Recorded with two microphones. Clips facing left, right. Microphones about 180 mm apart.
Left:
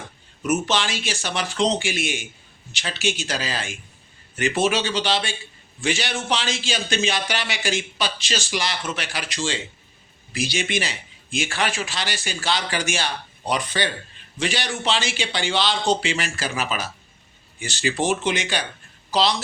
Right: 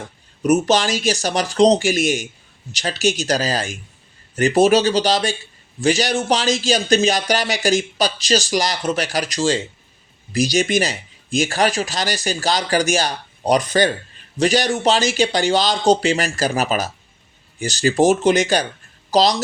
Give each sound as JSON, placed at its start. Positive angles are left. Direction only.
{"t": 0.4, "sound": "speech", "side_deg": -40}